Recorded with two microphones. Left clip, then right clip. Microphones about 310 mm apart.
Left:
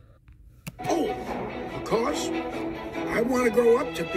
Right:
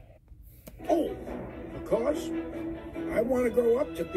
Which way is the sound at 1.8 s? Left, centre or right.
Left.